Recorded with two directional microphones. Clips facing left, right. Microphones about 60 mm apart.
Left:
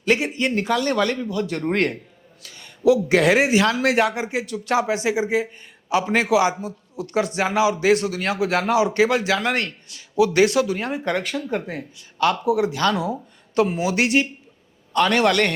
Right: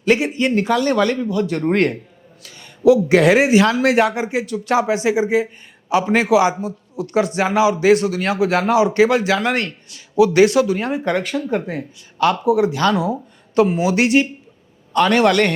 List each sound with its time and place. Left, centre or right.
0.0 s a man's voice: right